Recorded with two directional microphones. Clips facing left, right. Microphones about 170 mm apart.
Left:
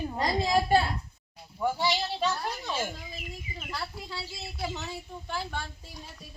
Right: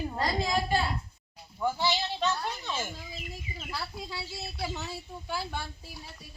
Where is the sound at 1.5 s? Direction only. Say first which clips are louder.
Left 1 dB; 10° left (ahead or behind).